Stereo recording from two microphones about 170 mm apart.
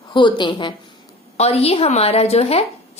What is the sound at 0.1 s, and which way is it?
A woman's voice, 25° left (ahead or behind).